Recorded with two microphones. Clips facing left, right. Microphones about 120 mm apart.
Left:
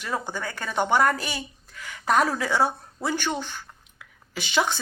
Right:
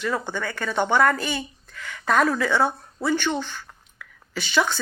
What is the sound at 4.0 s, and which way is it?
Whispering, 20° left (ahead or behind).